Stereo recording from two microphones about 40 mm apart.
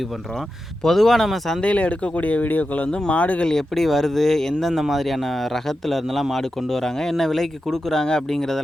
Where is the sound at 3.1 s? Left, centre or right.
Left.